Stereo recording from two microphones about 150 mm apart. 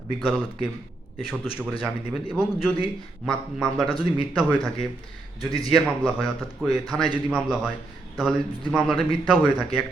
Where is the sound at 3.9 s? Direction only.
35° left (ahead or behind).